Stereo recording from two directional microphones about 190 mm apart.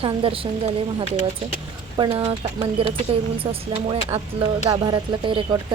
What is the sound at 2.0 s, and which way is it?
Speech, 25° right (ahead or behind).